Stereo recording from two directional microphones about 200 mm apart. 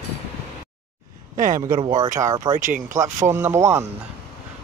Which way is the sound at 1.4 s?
15° right (ahead or behind).